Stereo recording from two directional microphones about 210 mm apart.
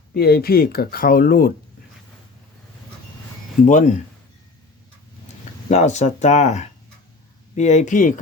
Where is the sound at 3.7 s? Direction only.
35° left (ahead or behind).